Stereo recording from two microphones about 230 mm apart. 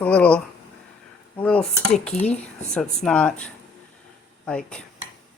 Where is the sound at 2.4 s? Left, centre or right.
Centre.